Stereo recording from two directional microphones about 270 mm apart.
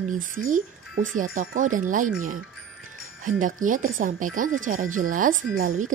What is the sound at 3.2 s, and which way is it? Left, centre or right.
Speech, right.